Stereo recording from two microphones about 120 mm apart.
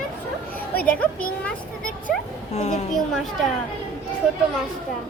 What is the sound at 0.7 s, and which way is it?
Speech, 15° left (ahead or behind).